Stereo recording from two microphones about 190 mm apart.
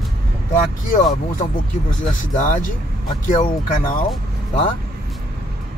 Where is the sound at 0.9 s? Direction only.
45° left (ahead or behind).